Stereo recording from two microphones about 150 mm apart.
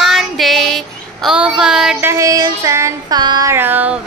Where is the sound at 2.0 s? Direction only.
20° right (ahead or behind).